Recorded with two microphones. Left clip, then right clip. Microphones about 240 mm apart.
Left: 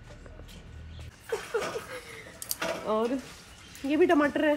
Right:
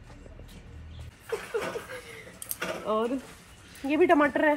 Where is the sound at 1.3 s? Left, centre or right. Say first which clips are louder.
Even; left.